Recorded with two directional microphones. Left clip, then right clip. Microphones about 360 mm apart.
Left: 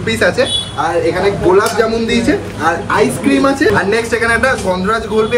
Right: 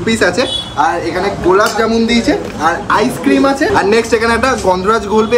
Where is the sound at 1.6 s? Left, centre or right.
Centre.